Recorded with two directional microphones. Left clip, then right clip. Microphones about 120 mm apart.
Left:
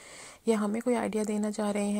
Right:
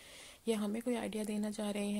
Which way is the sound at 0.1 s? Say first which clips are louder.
Left 8 dB; 45° left (ahead or behind).